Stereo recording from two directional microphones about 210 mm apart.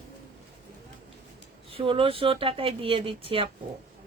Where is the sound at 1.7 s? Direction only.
25° right (ahead or behind).